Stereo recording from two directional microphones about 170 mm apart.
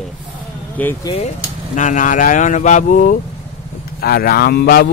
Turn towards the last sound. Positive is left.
turn(degrees=65)  # may be behind; listen again after turning